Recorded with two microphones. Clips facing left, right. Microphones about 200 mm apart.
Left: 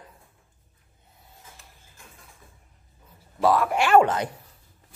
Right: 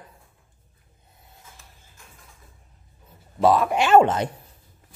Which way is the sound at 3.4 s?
20° right (ahead or behind).